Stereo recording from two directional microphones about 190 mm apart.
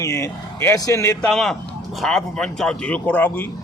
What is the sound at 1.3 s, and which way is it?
A man's voice, centre (ahead or behind).